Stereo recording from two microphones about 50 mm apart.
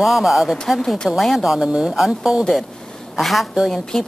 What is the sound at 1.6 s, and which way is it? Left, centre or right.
Speech, centre.